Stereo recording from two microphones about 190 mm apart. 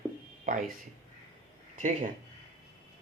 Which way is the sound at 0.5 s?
45° right (ahead or behind).